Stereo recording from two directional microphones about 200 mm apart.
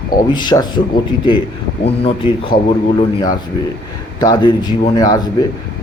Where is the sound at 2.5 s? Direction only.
45° left (ahead or behind).